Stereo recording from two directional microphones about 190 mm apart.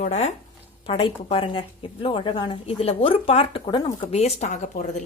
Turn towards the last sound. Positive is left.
turn(degrees=40)  # may be behind; listen again after turning